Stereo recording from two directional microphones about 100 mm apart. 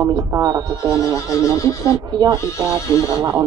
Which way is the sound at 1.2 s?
35° left (ahead or behind).